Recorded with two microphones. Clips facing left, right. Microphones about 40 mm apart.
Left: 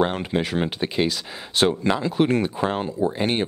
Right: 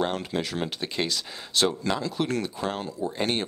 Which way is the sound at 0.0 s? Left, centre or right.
Left.